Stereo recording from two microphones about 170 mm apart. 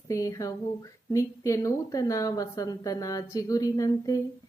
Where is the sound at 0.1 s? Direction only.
20° left (ahead or behind).